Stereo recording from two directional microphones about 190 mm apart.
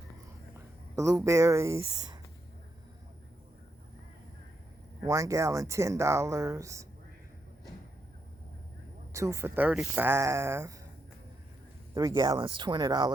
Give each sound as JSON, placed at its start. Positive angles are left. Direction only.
{"t": 0.9, "sound": "speech", "side_deg": -15}
{"t": 5.0, "sound": "speech", "side_deg": -15}
{"t": 9.1, "sound": "speech", "side_deg": -15}
{"t": 11.9, "sound": "speech", "side_deg": -20}